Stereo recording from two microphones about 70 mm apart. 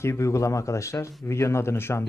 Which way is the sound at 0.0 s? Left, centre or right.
Left.